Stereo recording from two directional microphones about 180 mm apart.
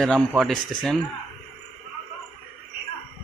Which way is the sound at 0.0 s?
Centre (ahead or behind).